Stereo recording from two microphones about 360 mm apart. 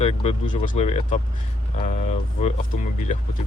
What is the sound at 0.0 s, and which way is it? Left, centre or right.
Speech, centre.